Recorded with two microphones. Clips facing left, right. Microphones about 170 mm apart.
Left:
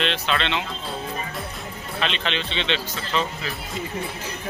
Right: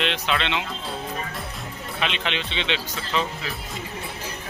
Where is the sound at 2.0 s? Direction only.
15° right (ahead or behind).